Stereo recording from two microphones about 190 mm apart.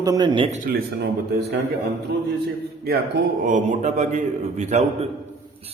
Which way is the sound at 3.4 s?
40° right (ahead or behind).